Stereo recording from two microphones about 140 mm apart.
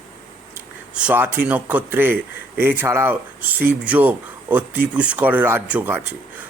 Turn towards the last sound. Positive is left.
turn(degrees=-10)  # may be behind; listen again after turning